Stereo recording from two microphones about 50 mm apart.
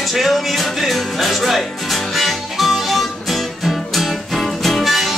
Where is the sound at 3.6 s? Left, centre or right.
Centre.